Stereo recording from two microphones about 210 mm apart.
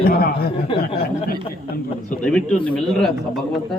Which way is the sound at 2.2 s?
5° left (ahead or behind).